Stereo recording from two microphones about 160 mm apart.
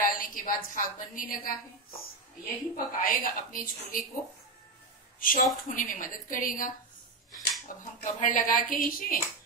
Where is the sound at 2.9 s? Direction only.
60° left (ahead or behind).